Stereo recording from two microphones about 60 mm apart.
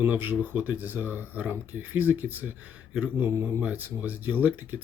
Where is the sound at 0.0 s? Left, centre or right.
Right.